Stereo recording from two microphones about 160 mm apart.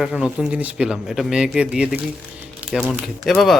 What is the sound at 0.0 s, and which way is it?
A man's voice, 5° right (ahead or behind).